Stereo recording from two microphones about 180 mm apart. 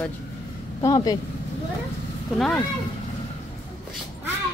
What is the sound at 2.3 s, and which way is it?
Speech, 5° left (ahead or behind).